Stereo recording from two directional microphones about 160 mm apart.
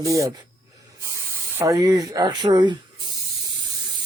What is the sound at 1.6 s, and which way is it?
Speech, 20° right (ahead or behind).